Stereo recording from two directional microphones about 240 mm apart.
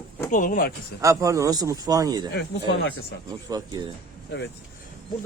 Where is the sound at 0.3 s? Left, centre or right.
Left.